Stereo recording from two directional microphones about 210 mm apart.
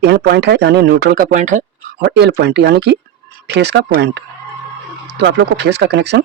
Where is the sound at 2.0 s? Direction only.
55° right (ahead or behind).